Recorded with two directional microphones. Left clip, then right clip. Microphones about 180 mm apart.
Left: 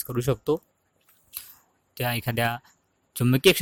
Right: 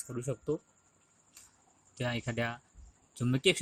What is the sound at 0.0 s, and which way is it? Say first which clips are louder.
Speech: left 11 dB; 50° left (ahead or behind).